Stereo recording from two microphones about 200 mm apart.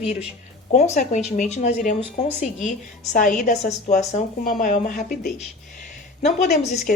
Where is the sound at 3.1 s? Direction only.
40° left (ahead or behind).